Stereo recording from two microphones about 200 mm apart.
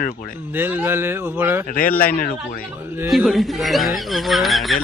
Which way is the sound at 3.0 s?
Centre (ahead or behind).